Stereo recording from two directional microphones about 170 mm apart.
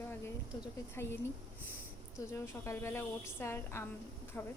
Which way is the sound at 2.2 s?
15° left (ahead or behind).